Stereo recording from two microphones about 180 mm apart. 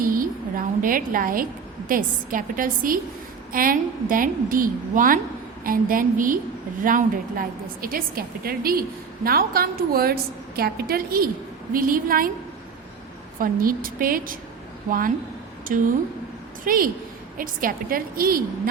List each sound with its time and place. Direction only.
0.0 s a sound: 50° right (ahead or behind)
1.9 s a woman's voice: 50° right (ahead or behind)
13.4 s a woman's voice: 50° right (ahead or behind)